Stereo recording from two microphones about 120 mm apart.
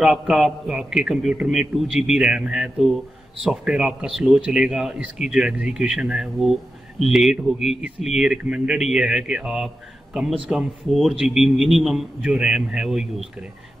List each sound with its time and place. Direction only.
0.0 s a man's voice: 5° right (ahead or behind)